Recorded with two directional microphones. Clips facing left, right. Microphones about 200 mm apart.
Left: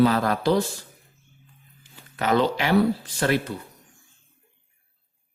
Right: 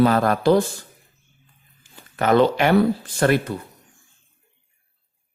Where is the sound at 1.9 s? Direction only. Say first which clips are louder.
Right 4 dB; 50° right (ahead or behind).